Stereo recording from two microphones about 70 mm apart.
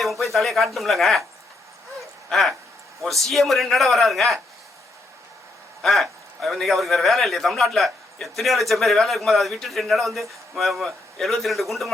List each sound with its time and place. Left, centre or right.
0.0 s a man's voice: centre
2.0 s a sound: centre
3.0 s a man's voice: centre
5.8 s a man's voice: centre